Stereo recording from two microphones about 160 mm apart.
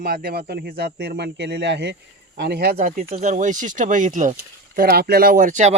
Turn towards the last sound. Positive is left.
turn(degrees=-50)  # may be behind; listen again after turning